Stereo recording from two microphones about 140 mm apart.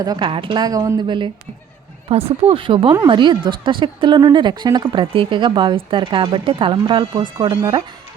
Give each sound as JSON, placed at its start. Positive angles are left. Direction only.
{"t": 0.0, "sound": "speech", "side_deg": -30}
{"t": 0.3, "sound": "a woman's voice", "side_deg": -40}
{"t": 7.0, "sound": "speech", "side_deg": -30}